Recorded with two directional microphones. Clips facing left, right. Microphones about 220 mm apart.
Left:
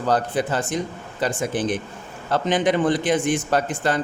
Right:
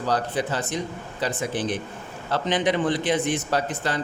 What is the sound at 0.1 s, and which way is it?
A man's voice, 50° left (ahead or behind).